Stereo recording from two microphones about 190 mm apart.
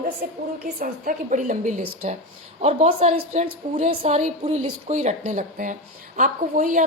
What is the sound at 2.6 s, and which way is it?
A woman's voice, 35° right (ahead or behind).